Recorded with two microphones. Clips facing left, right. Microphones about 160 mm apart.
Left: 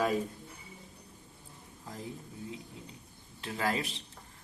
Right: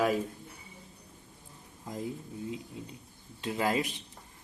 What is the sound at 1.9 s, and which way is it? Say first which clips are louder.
Speech: right 6 dB; 20° right (ahead or behind).